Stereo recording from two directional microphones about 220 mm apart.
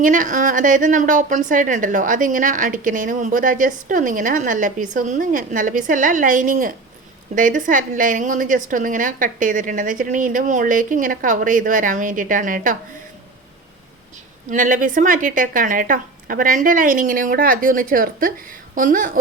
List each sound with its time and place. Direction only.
0.0 s a woman's voice: 35° right (ahead or behind)
14.5 s a woman's voice: 35° right (ahead or behind)